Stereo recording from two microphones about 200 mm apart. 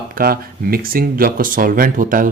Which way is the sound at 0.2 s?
50° right (ahead or behind).